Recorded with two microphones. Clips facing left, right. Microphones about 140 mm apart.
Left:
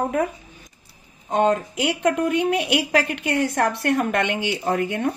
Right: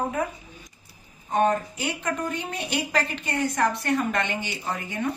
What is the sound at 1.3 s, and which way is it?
A woman's voice, 80° left.